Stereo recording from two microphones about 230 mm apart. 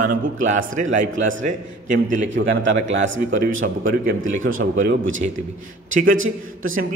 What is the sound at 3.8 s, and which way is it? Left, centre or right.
A man's voice, right.